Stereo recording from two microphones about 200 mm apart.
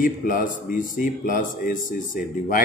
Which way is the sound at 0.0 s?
45° left (ahead or behind).